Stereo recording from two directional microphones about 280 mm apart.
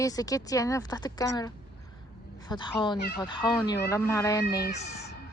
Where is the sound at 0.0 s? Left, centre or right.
Centre.